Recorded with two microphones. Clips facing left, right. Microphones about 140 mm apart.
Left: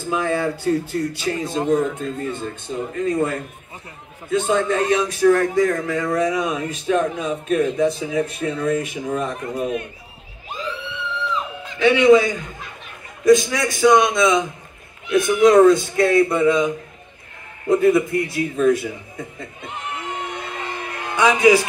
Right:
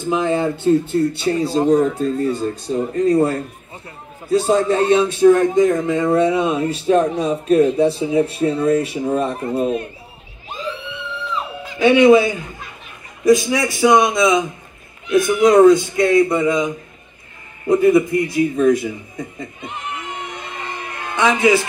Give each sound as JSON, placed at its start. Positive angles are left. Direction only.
{"t": 0.0, "sound": "speech", "side_deg": -20}
{"t": 11.6, "sound": "a man's voice", "side_deg": -15}
{"t": 21.1, "sound": "speech", "side_deg": 10}